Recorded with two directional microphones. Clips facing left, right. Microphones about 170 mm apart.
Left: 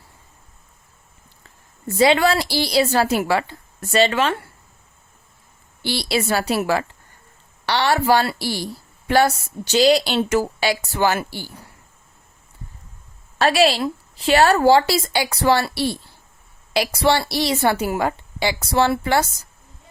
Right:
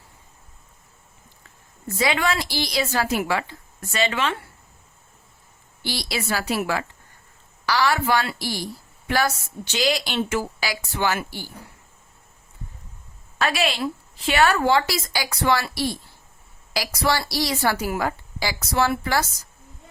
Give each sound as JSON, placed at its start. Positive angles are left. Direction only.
{"t": 2.0, "sound": "a woman's voice", "side_deg": 35}
{"t": 5.8, "sound": "a woman's voice", "side_deg": 30}
{"t": 13.4, "sound": "a woman's voice", "side_deg": 35}